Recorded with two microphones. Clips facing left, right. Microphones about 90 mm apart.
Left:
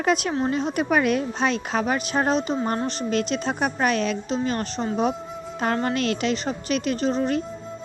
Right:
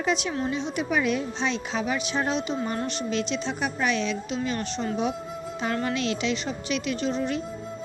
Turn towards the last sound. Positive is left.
turn(degrees=40)  # may be behind; listen again after turning